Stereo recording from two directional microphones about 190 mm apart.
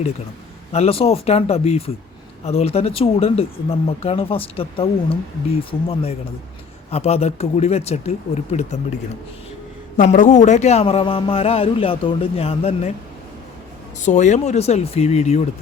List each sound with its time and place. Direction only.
0.7 s a man's voice: 30° left (ahead or behind)
10.0 s a man's voice: 40° left (ahead or behind)
14.0 s a man's voice: 40° left (ahead or behind)